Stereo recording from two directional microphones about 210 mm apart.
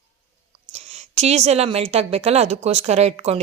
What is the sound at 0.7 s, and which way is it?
A woman's voice, 30° right (ahead or behind).